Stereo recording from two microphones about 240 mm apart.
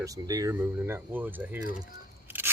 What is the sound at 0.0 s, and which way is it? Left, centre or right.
Speech, centre.